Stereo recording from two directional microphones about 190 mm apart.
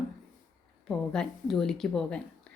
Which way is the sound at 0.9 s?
5° left (ahead or behind).